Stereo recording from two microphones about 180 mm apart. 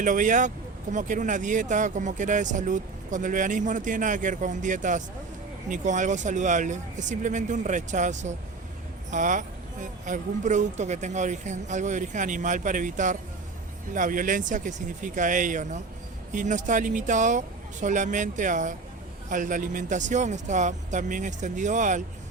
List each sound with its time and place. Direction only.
0.0 s speech: 45° right (ahead or behind)